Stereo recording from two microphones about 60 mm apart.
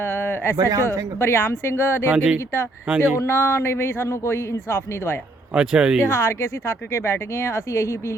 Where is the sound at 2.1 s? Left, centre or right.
Right.